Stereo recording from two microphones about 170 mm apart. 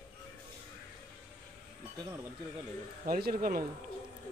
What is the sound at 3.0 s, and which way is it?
Speech, 55° right (ahead or behind).